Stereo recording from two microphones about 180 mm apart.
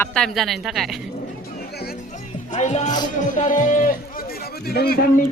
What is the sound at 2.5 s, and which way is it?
A man's voice, 40° left (ahead or behind).